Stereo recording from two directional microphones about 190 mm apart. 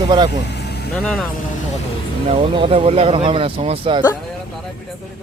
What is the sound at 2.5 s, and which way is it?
Speech, 30° right (ahead or behind).